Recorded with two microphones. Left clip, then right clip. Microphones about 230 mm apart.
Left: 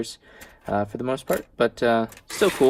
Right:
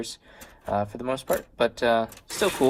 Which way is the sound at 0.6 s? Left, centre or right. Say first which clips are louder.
Left 2 dB; left.